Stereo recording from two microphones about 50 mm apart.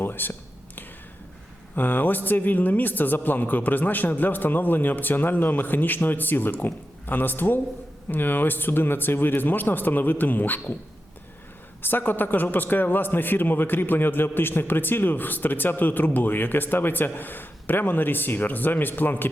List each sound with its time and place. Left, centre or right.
0.0 s a sound: left
1.7 s a man's voice: left
11.8 s a man's voice: left